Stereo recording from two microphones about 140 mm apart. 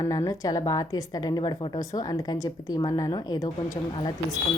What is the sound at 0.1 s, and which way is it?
A woman's voice, 25° left (ahead or behind).